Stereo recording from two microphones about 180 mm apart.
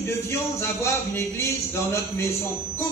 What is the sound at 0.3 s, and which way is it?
Speech, 15° left (ahead or behind).